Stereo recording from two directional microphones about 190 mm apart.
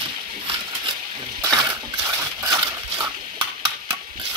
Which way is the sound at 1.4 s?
20° right (ahead or behind).